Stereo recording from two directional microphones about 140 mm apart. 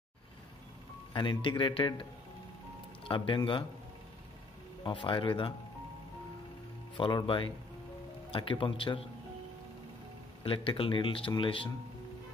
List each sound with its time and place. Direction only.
1.1 s speech: 35° left (ahead or behind)
3.1 s speech: 35° left (ahead or behind)
4.8 s speech: 35° left (ahead or behind)
7.0 s speech: 35° left (ahead or behind)
10.4 s speech: 40° left (ahead or behind)